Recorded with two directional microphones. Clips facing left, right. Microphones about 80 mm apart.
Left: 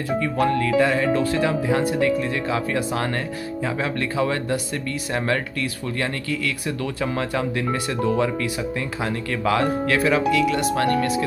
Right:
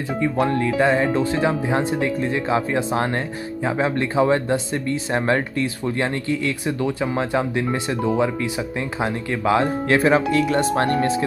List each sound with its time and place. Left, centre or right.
0.2 s speech: right